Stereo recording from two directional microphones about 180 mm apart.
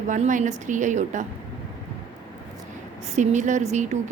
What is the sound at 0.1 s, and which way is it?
A woman's voice, 45° right (ahead or behind).